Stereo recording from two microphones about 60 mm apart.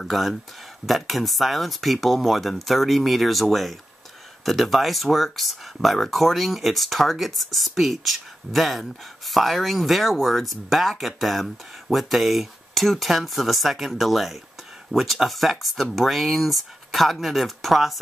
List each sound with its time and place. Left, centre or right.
0.1 s speech: centre